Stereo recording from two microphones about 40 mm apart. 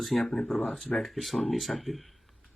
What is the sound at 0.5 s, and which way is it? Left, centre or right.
Speech, left.